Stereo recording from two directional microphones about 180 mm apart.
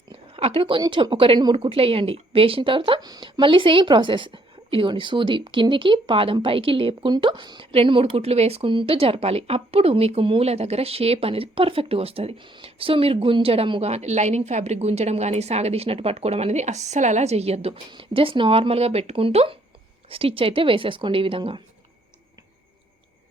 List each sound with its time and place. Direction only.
0.1 s a woman's voice: 30° right (ahead or behind)